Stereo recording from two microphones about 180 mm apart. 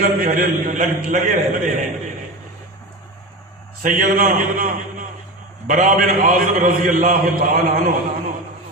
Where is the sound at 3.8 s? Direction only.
50° right (ahead or behind).